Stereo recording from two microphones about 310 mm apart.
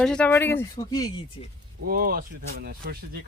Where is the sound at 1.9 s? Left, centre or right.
Right.